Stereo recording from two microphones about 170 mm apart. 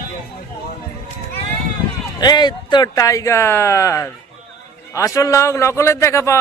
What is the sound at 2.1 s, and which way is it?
A man's voice, 25° left (ahead or behind).